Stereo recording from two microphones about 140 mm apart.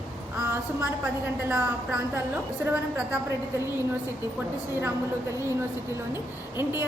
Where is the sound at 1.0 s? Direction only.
10° right (ahead or behind).